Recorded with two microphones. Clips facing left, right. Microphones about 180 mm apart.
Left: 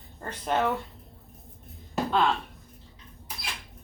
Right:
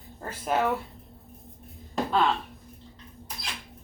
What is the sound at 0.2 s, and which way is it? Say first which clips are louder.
Speech: even; 5° right (ahead or behind).